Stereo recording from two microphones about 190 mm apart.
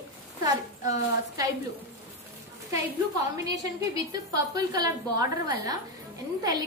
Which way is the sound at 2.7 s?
20° right (ahead or behind).